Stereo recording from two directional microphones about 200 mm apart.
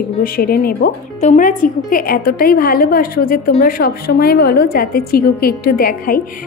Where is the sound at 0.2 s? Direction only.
45° left (ahead or behind).